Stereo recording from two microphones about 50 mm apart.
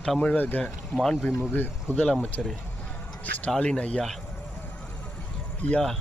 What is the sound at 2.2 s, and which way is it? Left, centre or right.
Speech, left.